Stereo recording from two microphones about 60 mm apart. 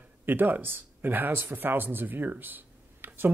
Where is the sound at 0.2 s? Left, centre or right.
Right.